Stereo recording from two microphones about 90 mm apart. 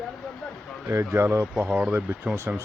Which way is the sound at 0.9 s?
35° right (ahead or behind).